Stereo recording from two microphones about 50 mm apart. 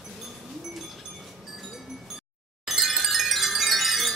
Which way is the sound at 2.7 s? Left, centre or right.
Centre.